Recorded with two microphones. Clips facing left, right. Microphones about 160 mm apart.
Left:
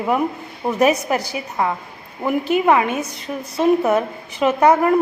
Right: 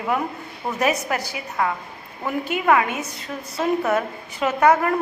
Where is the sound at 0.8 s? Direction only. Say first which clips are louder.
Left 5 dB; 20° left (ahead or behind).